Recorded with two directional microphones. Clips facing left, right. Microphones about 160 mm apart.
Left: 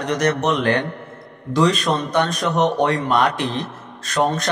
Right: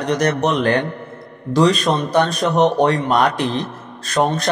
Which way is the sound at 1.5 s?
35° right (ahead or behind).